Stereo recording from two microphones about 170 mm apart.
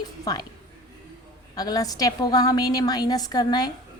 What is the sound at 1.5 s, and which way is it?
A woman's voice, 20° left (ahead or behind).